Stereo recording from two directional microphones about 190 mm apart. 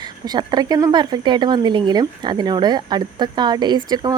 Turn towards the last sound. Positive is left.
turn(degrees=-20)  # may be behind; listen again after turning